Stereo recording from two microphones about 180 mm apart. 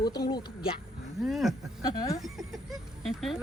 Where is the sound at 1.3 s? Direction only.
Centre (ahead or behind).